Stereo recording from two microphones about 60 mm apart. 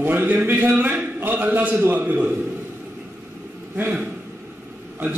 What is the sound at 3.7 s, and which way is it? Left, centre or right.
Speech, right.